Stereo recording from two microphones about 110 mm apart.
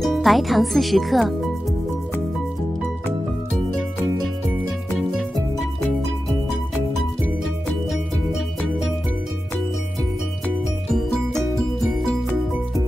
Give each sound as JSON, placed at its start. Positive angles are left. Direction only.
{"t": 0.0, "sound": "speech", "side_deg": 0}